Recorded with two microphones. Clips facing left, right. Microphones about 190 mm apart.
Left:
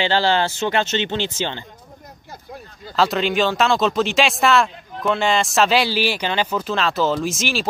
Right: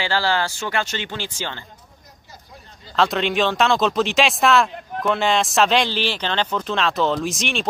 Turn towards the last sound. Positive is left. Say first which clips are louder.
# left 1 dB
turn(degrees=0)  # may be behind; listen again after turning